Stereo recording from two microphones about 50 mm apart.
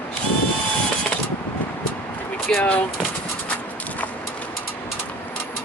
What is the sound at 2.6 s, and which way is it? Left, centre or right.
Speech, left.